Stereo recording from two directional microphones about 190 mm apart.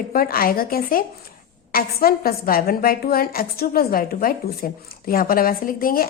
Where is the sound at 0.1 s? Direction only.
50° left (ahead or behind).